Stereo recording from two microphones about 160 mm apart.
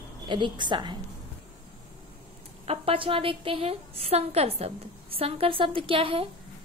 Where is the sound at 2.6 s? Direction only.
35° right (ahead or behind).